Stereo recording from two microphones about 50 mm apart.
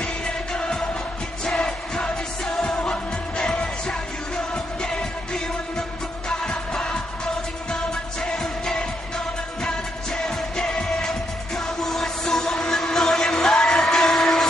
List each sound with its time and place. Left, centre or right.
0.0 s music: centre
8.2 s music of asia: centre
10.1 s music of asia: centre